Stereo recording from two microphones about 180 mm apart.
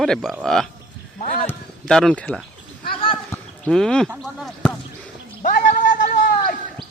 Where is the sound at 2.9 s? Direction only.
30° left (ahead or behind).